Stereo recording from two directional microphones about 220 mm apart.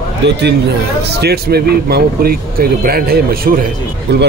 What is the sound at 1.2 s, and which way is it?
Speech, 45° right (ahead or behind).